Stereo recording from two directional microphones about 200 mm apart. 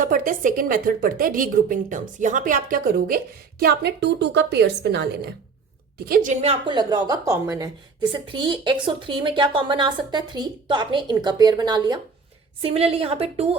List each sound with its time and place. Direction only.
0.0 s a woman's voice: 40° right (ahead or behind)
6.4 s speech: 25° right (ahead or behind)